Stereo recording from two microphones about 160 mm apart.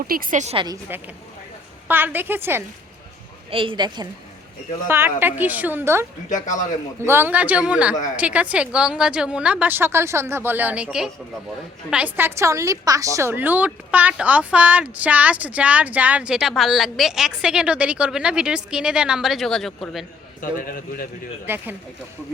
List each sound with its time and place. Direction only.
0.1 s a woman's voice: 55° right (ahead or behind)
0.5 s a woman's voice: 30° right (ahead or behind)
0.9 s a woman's voice: 10° right (ahead or behind)
3.5 s a woman's voice: 35° right (ahead or behind)
4.9 s a woman's voice: 15° right (ahead or behind)
6.2 s speech: 50° left (ahead or behind)
7.0 s a woman's voice: 15° right (ahead or behind)
11.9 s a woman's voice: 10° right (ahead or behind)
20.4 s a man's voice: 60° left (ahead or behind)
21.4 s a woman's voice: 15° right (ahead or behind)